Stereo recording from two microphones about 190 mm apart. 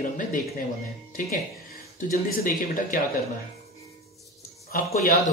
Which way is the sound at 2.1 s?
45° left (ahead or behind).